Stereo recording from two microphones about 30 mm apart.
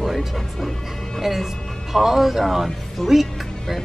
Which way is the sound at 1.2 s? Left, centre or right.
Centre.